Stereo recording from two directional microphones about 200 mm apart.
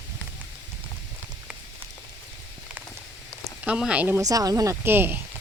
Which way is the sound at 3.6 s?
5° right (ahead or behind).